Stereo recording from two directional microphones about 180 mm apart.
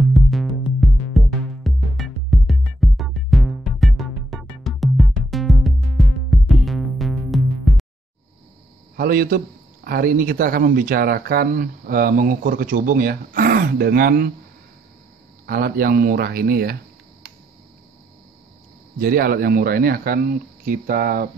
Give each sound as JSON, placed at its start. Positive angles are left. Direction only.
{"t": 0.7, "sound": "music", "side_deg": 0}
{"t": 8.9, "sound": "a man's voice", "side_deg": -55}
{"t": 15.4, "sound": "speech", "side_deg": -55}
{"t": 18.9, "sound": "speech", "side_deg": -55}